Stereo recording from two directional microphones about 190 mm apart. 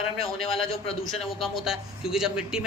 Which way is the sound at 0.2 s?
30° left (ahead or behind).